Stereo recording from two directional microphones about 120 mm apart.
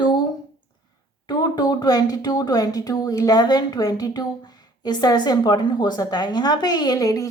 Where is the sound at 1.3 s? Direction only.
35° left (ahead or behind).